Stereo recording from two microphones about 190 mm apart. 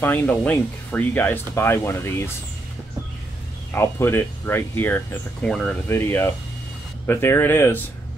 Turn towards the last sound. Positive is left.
turn(degrees=10)  # may be behind; listen again after turning